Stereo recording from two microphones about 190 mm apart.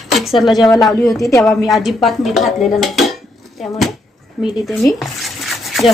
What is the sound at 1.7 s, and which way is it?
Speech, centre (ahead or behind).